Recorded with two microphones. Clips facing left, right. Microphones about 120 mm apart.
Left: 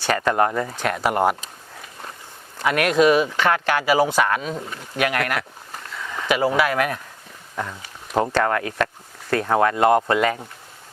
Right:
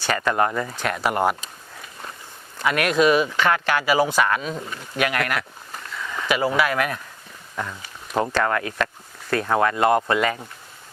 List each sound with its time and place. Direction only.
0.1 s speech: 40° left (ahead or behind)
2.6 s speech: 45° left (ahead or behind)
4.7 s a sound: 45° left (ahead or behind)
6.2 s speech: 45° left (ahead or behind)